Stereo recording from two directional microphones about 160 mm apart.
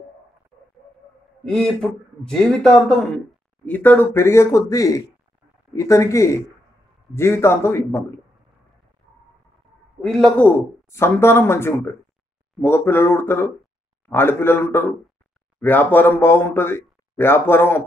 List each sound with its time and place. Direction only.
1.4 s speech: 5° left (ahead or behind)
10.0 s speech: 5° left (ahead or behind)